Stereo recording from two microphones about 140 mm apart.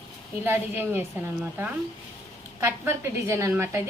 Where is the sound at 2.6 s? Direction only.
20° right (ahead or behind).